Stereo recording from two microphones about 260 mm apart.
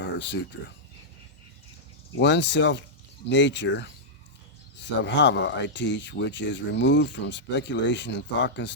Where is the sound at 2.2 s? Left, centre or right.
Left.